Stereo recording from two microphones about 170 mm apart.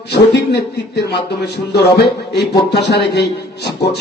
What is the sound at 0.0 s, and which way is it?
A man's voice, 80° left.